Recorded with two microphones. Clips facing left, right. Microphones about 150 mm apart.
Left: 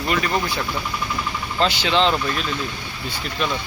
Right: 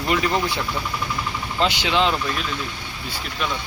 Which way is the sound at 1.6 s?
15° right (ahead or behind).